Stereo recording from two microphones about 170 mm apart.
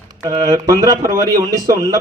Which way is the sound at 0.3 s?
20° right (ahead or behind).